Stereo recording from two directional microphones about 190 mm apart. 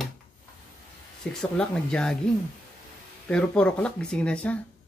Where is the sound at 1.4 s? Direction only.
5° left (ahead or behind).